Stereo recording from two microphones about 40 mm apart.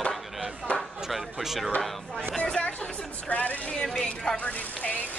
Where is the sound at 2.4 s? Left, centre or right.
Left.